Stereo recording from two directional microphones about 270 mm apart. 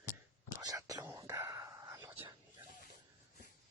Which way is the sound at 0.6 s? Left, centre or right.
Centre.